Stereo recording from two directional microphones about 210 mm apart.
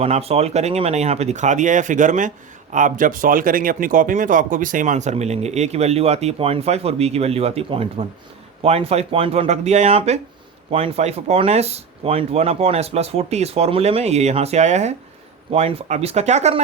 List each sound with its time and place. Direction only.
0.0 s speech: 30° right (ahead or behind)